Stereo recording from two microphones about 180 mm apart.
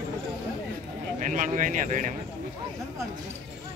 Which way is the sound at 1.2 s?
45° right (ahead or behind).